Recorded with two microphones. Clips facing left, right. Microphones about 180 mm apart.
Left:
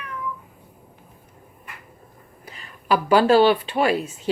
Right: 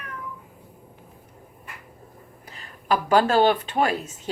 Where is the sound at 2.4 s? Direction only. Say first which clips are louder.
Left 1 dB; 40° right (ahead or behind).